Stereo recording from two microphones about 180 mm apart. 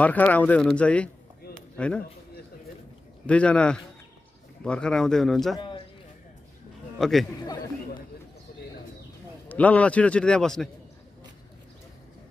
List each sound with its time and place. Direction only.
0.0 s a man's voice: 10° left (ahead or behind)
3.3 s a man's voice: 5° left (ahead or behind)
5.6 s a sound: 25° left (ahead or behind)
7.0 s speech: centre (ahead or behind)
9.5 s a man's voice: 10° left (ahead or behind)